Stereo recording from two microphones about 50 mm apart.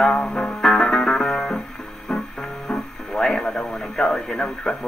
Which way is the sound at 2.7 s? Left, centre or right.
Centre.